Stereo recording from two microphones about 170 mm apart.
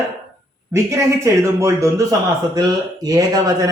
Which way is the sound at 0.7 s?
15° right (ahead or behind).